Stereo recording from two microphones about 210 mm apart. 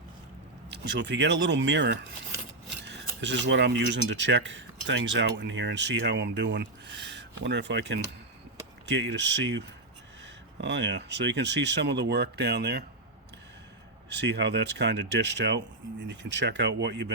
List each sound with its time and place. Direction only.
0.7 s speech: 55° right (ahead or behind)
14.1 s speech: 55° right (ahead or behind)